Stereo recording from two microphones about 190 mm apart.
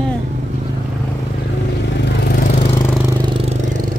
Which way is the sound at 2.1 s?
55° left (ahead or behind).